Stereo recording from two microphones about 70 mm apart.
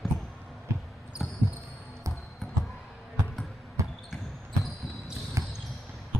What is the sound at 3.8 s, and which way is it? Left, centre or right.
Basketball bounce, right.